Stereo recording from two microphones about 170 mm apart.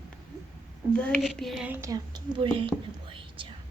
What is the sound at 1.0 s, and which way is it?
Speech, 5° left (ahead or behind).